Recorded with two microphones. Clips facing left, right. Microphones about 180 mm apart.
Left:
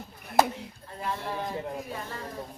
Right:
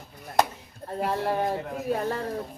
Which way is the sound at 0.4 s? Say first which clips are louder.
Left 1 dB; 5° left (ahead or behind).